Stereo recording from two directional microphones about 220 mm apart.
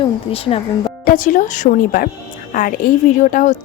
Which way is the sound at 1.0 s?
35° left (ahead or behind).